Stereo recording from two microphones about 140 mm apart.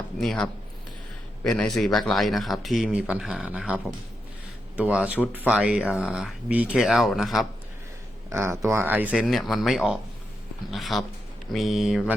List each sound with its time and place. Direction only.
0.2 s speech: 5° left (ahead or behind)
4.8 s speech: 10° right (ahead or behind)
8.3 s speech: 20° right (ahead or behind)
9.2 s speech: centre (ahead or behind)